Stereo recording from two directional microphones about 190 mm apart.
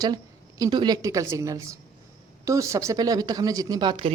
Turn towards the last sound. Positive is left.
turn(degrees=-25)  # may be behind; listen again after turning